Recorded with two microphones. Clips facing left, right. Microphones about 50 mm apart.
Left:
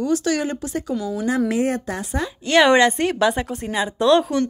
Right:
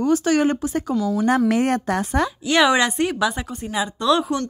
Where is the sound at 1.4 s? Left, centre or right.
Right.